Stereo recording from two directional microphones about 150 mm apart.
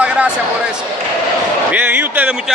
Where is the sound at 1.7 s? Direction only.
10° right (ahead or behind).